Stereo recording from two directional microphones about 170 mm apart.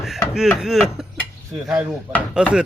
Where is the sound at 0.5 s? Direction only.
Centre (ahead or behind).